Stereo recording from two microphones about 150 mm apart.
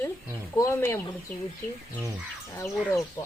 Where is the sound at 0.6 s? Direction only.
15° left (ahead or behind).